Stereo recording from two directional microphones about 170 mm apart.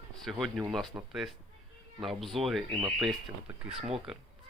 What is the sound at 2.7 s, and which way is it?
Speech, 25° right (ahead or behind).